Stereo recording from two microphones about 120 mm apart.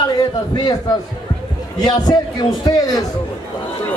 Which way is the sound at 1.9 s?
35° left (ahead or behind).